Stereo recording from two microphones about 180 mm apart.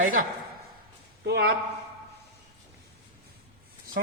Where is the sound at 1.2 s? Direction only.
65° right (ahead or behind).